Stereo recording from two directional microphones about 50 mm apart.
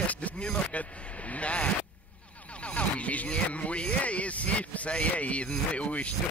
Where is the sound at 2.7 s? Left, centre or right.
Left.